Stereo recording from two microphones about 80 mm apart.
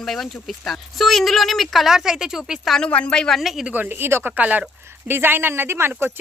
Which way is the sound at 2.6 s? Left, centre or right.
Centre.